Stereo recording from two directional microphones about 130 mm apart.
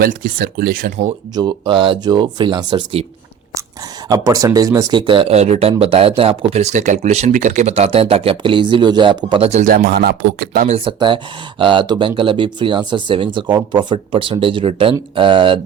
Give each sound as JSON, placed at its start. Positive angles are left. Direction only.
{"t": 0.1, "sound": "speech", "side_deg": -90}
{"t": 1.4, "sound": "speech", "side_deg": -35}
{"t": 4.1, "sound": "speech", "side_deg": -25}
{"t": 5.3, "sound": "speech", "side_deg": -55}
{"t": 9.5, "sound": "speech", "side_deg": -80}
{"t": 10.8, "sound": "speech", "side_deg": -40}